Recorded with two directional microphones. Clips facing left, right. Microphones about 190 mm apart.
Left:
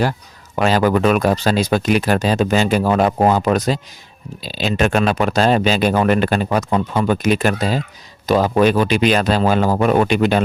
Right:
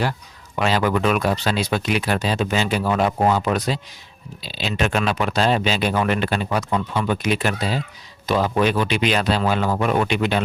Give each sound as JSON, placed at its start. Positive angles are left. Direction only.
{"t": 0.5, "sound": "speech", "side_deg": 40}